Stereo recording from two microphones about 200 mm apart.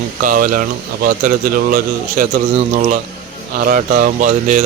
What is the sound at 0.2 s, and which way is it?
Speech, 45° right (ahead or behind).